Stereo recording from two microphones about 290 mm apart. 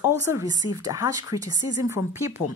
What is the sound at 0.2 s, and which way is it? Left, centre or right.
A woman's voice, centre.